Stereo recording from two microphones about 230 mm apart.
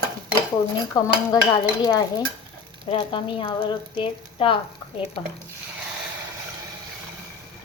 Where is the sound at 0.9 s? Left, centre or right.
Centre.